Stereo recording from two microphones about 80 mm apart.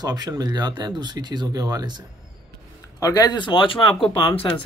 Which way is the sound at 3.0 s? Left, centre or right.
Left.